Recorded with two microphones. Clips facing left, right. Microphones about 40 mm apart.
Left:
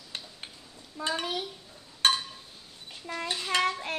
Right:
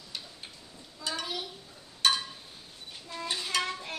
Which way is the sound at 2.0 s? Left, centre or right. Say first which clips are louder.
Left 2 dB; left.